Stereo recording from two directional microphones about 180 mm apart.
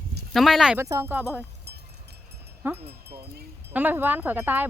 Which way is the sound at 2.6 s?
10° right (ahead or behind).